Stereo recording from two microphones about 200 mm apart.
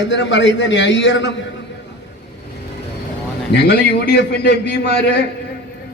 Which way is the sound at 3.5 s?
55° left (ahead or behind).